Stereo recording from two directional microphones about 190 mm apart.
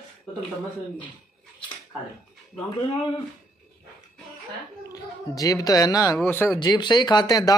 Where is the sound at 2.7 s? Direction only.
30° left (ahead or behind).